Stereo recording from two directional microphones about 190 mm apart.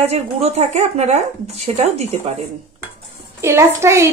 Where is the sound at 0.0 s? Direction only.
35° right (ahead or behind).